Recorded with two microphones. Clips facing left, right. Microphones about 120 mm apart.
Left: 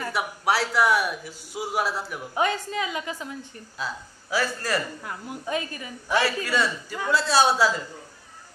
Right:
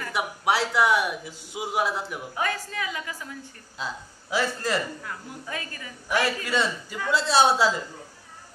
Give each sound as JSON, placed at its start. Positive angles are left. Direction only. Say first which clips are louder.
{"t": 0.1, "sound": "a man's voice", "louder": "right 1 dB", "side_deg": -20}
{"t": 2.3, "sound": "a woman's voice", "louder": "left 5 dB", "side_deg": 20}
{"t": 3.7, "sound": "speech", "louder": "left 1 dB", "side_deg": -20}
{"t": 5.0, "sound": "a woman's voice", "louder": "left 4 dB", "side_deg": 20}
{"t": 6.2, "sound": "a man's voice", "louder": "left 1 dB", "side_deg": -20}